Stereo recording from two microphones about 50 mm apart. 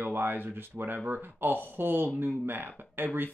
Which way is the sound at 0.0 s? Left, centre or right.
Right.